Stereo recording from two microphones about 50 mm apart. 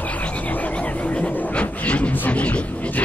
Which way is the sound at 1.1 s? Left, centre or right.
Left.